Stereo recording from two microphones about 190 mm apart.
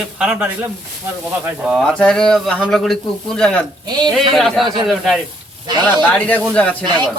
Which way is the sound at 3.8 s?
20° right (ahead or behind).